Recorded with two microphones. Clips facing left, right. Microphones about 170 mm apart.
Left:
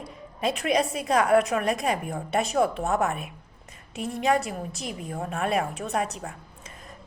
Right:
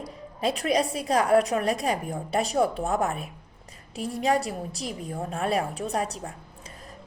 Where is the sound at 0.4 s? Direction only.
35° right (ahead or behind).